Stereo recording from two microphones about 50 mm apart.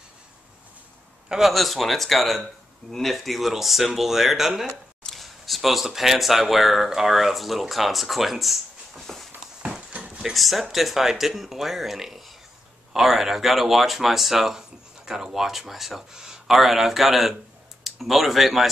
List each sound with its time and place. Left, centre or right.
1.3 s speech: centre
9.6 s horse: centre
9.9 s dog: right
10.3 s speech: centre